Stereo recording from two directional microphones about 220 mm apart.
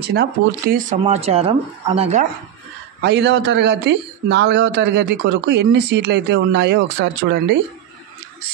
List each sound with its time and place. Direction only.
0.0 s speech: 50° right (ahead or behind); by 2.2 s 30° right (ahead or behind)
3.0 s a man's voice: 50° right (ahead or behind)